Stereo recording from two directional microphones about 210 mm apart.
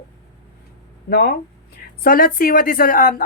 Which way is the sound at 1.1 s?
50° left (ahead or behind).